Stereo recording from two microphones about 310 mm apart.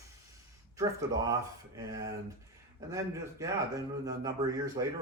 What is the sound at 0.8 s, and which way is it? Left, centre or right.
Speech, centre.